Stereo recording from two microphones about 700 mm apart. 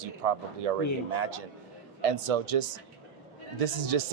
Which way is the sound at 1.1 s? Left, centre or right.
Right.